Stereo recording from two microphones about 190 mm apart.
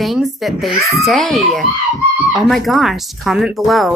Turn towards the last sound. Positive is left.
turn(degrees=0)  # may be behind; listen again after turning